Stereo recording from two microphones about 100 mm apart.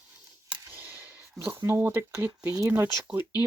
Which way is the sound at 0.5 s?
20° right (ahead or behind).